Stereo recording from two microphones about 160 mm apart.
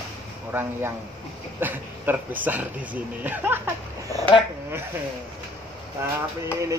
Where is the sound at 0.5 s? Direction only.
10° right (ahead or behind).